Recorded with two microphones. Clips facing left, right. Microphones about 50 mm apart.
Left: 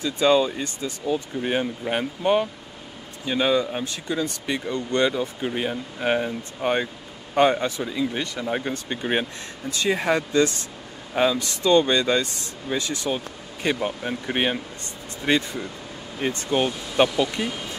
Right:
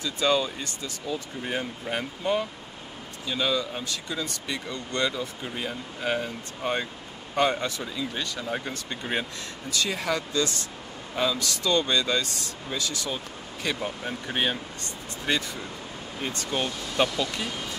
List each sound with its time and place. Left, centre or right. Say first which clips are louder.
0.0 s speech: left 6 dB; left